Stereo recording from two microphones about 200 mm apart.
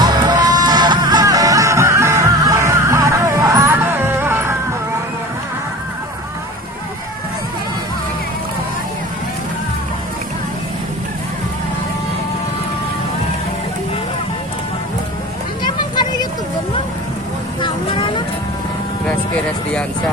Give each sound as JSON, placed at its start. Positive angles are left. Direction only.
{"t": 0.0, "sound": "music", "side_deg": -20}
{"t": 15.6, "sound": "vehicle", "side_deg": 20}
{"t": 17.6, "sound": "vehicle", "side_deg": 25}